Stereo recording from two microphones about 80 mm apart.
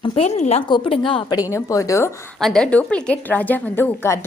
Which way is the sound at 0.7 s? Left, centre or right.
Left.